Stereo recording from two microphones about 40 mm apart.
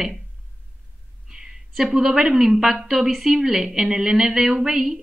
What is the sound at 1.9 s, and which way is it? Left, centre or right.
A woman's voice, centre.